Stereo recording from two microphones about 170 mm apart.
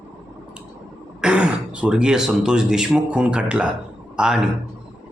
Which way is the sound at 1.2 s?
5° right (ahead or behind).